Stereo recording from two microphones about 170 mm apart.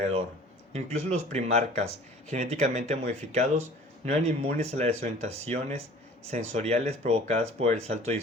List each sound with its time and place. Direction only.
0.7 s speech: 40° right (ahead or behind)